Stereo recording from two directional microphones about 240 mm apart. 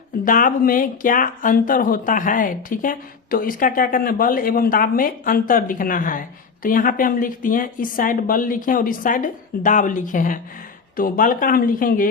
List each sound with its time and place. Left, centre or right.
0.3 s speech: left